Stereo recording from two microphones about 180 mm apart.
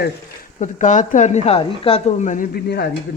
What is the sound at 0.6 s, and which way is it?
Speech, 45° left (ahead or behind).